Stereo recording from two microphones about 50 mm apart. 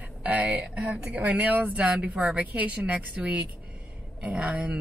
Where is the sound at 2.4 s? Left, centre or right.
Right.